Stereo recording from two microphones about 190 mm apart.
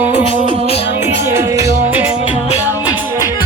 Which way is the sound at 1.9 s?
5° right (ahead or behind).